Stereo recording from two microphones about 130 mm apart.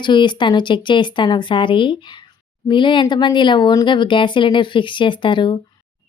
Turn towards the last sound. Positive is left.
turn(degrees=40)  # may be behind; listen again after turning